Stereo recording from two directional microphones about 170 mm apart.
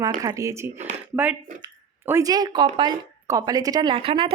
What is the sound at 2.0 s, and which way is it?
A woman's voice, 20° right (ahead or behind).